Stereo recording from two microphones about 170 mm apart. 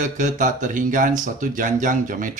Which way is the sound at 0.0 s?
50° right (ahead or behind).